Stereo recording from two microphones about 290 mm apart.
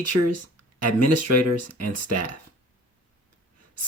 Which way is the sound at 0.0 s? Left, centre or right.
Right.